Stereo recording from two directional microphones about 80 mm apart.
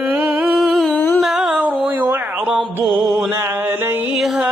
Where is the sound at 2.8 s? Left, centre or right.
Centre.